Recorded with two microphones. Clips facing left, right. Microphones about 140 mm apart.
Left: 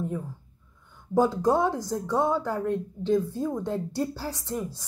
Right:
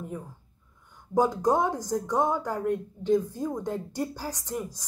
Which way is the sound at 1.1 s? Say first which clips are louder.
Left 1 dB; 15° right (ahead or behind).